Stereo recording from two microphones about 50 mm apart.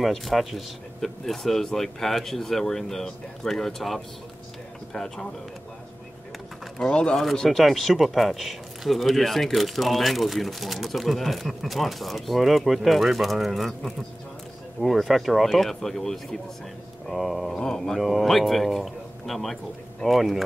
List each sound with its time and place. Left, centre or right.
0.0 s speech: centre
6.8 s speech: centre
7.2 s speech: centre
17.6 s speech: centre
17.9 s speech: centre